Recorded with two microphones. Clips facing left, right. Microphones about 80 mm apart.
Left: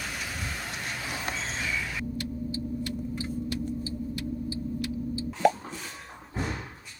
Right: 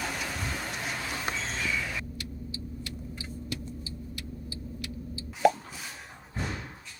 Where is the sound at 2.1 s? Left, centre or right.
Left.